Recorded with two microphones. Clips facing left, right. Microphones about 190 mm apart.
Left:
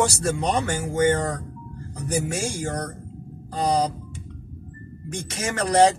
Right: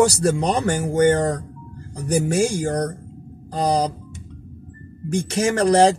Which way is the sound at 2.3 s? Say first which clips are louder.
Right 8 dB; 35° right (ahead or behind).